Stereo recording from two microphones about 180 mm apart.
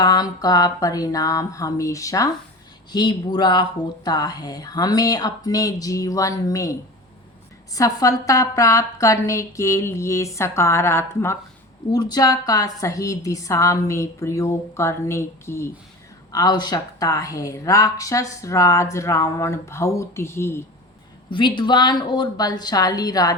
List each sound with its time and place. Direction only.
0.0 s speech: 20° left (ahead or behind)
7.8 s speech: 20° left (ahead or behind)
21.2 s speech: 25° left (ahead or behind)